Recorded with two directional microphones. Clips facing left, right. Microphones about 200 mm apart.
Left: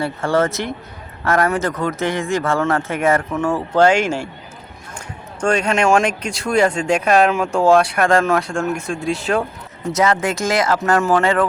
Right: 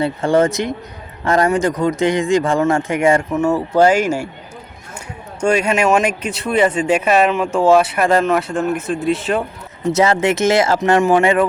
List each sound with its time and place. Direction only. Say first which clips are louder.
0.0 s speech: right 3 dB; 20° right (ahead or behind)
5.4 s speech: right 2 dB; 5° right (ahead or behind)
9.9 s speech: right 3 dB; 25° right (ahead or behind)